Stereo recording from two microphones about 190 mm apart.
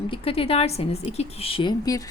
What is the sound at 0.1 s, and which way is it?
A woman's voice, 30° left (ahead or behind).